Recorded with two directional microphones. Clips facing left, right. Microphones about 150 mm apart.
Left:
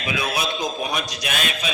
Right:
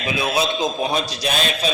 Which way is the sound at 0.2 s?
25° right (ahead or behind).